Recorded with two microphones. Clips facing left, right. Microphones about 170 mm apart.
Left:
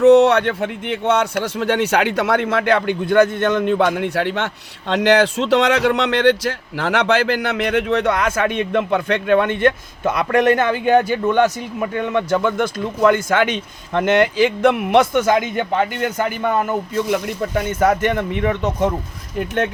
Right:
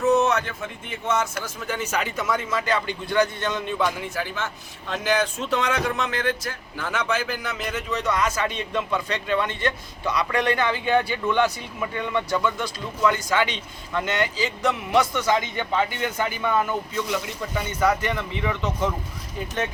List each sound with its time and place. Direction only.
0.0 s a man's voice: 70° left (ahead or behind); by 18.9 s 45° left (ahead or behind)
19.4 s speech: 65° left (ahead or behind)